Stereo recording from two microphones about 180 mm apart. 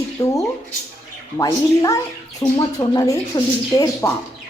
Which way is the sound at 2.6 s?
20° left (ahead or behind).